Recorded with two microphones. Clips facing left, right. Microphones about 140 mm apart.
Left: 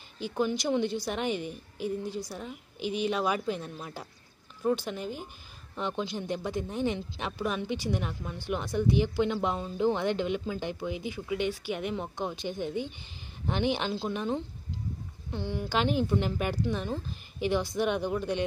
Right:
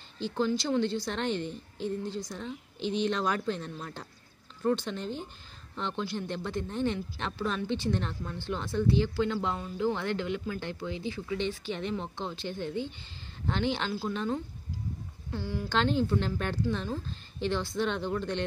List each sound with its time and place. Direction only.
0.2 s speech: 15° left (ahead or behind)